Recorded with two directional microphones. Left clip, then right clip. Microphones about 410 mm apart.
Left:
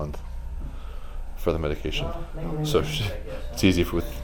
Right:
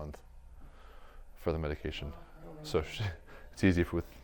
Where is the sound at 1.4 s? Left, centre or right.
Right.